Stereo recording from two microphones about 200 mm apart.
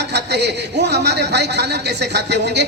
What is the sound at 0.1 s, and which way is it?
A man's voice, 55° right (ahead or behind).